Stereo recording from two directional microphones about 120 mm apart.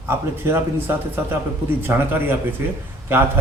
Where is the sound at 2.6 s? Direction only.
20° right (ahead or behind).